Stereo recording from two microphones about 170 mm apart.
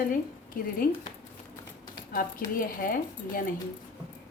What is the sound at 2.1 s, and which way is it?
Speech, 55° left (ahead or behind).